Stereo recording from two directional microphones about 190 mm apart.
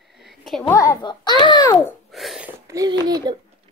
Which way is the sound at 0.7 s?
15° left (ahead or behind).